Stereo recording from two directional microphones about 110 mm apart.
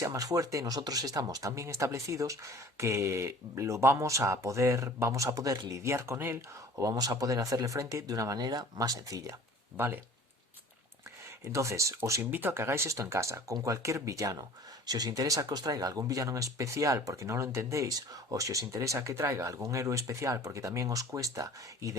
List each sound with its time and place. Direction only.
0.0 s speech: 30° right (ahead or behind)
9.7 s speech: 20° right (ahead or behind)
11.5 s speech: 25° right (ahead or behind)